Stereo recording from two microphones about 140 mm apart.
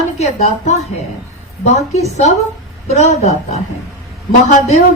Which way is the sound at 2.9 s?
55° left (ahead or behind).